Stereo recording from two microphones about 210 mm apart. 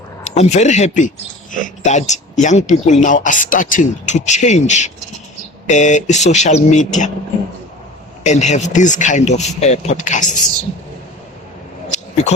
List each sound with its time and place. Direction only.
0.3 s speech: 35° left (ahead or behind)
8.2 s speech: 35° left (ahead or behind)
11.9 s a sound: 35° left (ahead or behind)